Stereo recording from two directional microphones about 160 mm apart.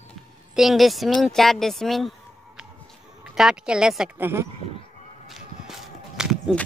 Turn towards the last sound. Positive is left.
turn(degrees=-5)  # may be behind; listen again after turning